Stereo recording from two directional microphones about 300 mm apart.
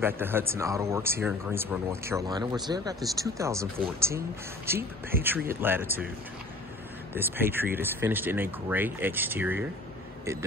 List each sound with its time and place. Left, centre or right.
0.0 s speech: centre
5.2 s speech: centre
7.2 s speech: centre